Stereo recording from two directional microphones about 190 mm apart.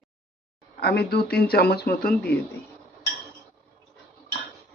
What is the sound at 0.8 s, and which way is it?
Speech, 55° left (ahead or behind).